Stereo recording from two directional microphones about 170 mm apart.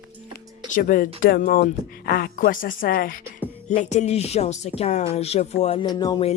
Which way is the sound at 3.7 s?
45° left (ahead or behind).